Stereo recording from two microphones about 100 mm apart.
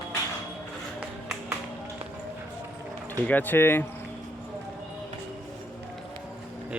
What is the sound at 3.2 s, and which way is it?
Speech, 15° left (ahead or behind).